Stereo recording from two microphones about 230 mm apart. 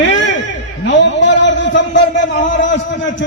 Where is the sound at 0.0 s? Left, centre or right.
Left.